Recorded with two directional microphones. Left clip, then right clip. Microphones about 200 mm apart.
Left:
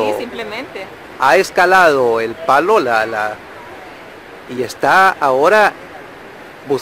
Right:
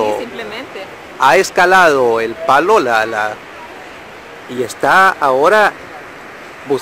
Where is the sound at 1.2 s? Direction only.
5° right (ahead or behind).